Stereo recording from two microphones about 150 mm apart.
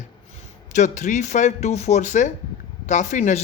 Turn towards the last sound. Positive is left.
turn(degrees=50)  # may be behind; listen again after turning